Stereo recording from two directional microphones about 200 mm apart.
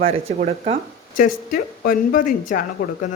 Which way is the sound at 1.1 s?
40° left (ahead or behind).